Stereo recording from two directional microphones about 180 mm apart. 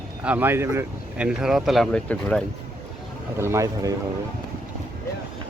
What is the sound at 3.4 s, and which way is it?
Speech, 15° right (ahead or behind).